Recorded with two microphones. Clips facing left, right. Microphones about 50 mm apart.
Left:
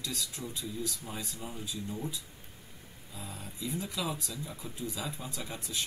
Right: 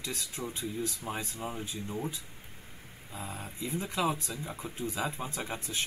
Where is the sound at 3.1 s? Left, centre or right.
Right.